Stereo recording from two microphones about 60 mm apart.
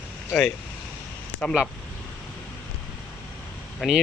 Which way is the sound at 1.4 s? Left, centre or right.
Centre.